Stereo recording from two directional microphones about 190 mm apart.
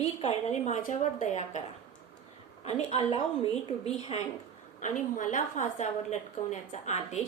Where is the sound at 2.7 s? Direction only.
35° left (ahead or behind).